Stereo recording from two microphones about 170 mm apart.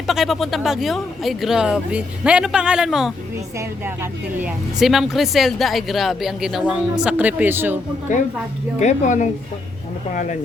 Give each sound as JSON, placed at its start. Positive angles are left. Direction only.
{"t": 0.1, "sound": "speech", "side_deg": 0}
{"t": 8.1, "sound": "speech", "side_deg": 45}